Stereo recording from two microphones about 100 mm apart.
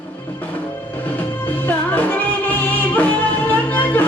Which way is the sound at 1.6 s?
20° left (ahead or behind).